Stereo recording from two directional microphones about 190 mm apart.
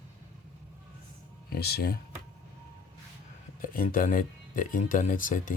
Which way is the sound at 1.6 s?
55° left (ahead or behind).